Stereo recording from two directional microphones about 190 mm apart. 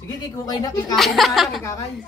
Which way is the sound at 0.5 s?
20° left (ahead or behind).